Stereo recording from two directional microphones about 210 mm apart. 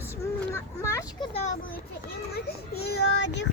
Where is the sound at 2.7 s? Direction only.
50° left (ahead or behind).